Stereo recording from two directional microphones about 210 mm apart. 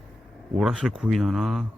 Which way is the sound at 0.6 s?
5° right (ahead or behind).